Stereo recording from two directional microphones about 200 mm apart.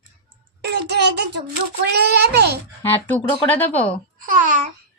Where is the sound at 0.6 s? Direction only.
55° right (ahead or behind).